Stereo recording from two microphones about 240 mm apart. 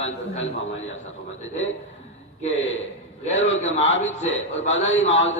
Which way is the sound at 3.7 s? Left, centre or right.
Left.